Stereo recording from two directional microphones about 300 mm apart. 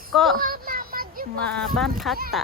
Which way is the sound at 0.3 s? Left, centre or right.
Right.